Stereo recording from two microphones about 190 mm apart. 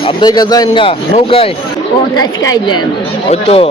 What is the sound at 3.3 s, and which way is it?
Speech, 30° left (ahead or behind).